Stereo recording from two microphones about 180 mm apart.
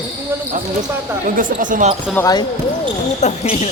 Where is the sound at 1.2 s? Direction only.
45° right (ahead or behind).